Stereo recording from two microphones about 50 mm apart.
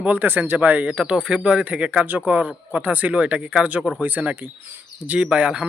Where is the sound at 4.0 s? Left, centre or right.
Right.